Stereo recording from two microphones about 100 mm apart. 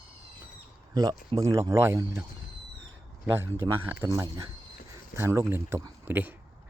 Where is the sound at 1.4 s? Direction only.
30° right (ahead or behind).